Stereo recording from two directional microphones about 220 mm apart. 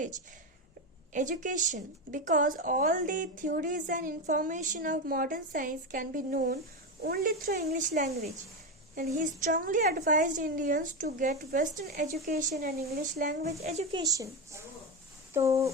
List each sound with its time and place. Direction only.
1.1 s a woman's voice: 35° right (ahead or behind)
9.4 s a woman's voice: 35° right (ahead or behind)
14.0 s a woman's voice: 15° right (ahead or behind)